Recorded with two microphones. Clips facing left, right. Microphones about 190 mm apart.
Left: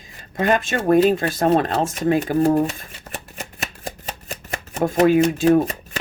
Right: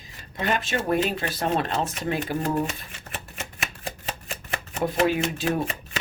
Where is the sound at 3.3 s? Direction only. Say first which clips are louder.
Left 3 dB; 40° left (ahead or behind).